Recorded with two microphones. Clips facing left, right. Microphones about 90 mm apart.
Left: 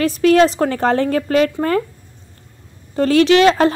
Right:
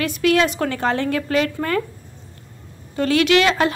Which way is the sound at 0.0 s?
35° left (ahead or behind).